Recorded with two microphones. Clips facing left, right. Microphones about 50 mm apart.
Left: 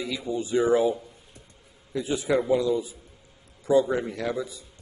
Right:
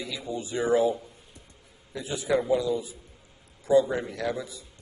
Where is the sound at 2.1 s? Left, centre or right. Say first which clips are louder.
Left 1 dB; left.